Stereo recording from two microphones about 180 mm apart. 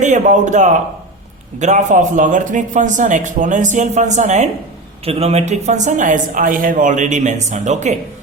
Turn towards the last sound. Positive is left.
turn(degrees=-40)  # may be behind; listen again after turning